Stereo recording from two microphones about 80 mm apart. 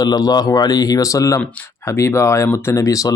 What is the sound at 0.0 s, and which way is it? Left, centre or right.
Speech, left.